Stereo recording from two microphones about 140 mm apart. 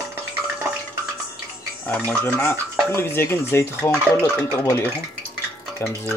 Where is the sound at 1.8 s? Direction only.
10° left (ahead or behind).